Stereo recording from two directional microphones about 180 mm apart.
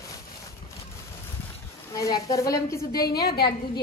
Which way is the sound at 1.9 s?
20° left (ahead or behind).